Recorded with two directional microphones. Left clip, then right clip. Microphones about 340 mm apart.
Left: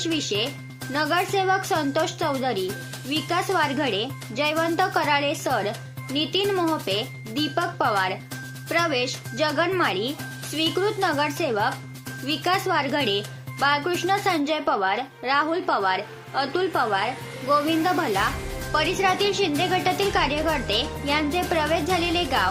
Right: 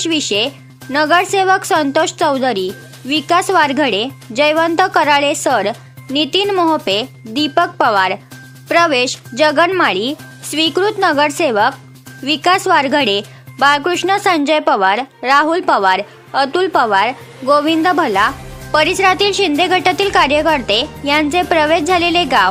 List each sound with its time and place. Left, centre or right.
0.0 s speech: right